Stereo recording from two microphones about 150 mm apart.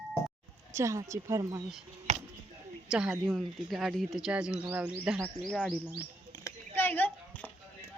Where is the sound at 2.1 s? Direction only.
50° right (ahead or behind).